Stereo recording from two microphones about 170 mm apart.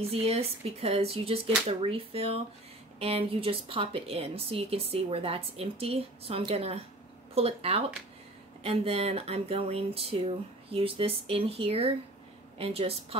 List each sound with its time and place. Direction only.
0.1 s a woman's voice: 35° right (ahead or behind)